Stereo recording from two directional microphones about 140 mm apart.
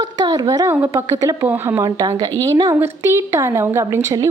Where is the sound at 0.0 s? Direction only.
30° right (ahead or behind).